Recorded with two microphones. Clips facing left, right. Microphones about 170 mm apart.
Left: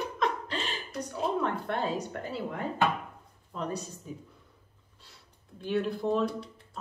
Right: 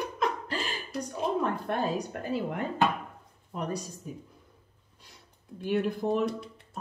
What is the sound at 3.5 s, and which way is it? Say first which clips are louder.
Speech: right 1 dB; 15° right (ahead or behind).